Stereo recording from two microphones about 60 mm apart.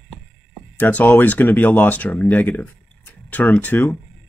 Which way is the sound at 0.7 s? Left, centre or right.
Left.